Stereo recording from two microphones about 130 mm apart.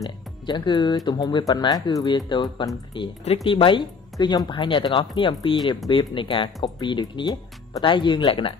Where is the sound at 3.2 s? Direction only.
45° left (ahead or behind).